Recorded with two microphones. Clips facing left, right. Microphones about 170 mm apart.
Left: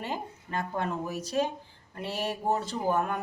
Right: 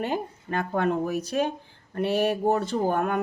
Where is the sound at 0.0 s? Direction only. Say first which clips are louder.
Right 7 dB; 60° right (ahead or behind).